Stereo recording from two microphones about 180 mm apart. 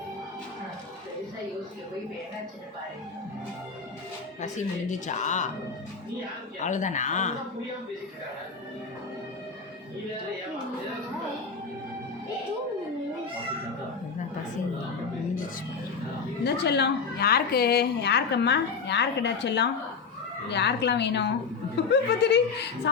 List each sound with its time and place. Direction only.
4.4 s speech: 40° left (ahead or behind)
6.6 s speech: 45° left (ahead or behind)
16.4 s a woman's voice: 70° left (ahead or behind)